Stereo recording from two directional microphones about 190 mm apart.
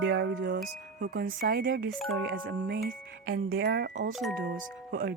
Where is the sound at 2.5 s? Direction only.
60° right (ahead or behind).